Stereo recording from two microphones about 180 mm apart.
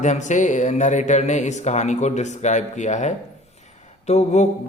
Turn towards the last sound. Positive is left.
turn(degrees=40)  # may be behind; listen again after turning